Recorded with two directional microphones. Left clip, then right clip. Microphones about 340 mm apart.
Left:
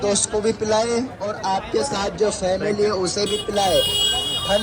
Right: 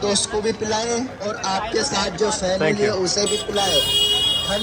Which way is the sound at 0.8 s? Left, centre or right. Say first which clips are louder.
Left 3 dB; centre.